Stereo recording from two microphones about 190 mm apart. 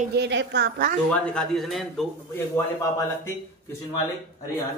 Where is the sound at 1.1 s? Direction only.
5° left (ahead or behind).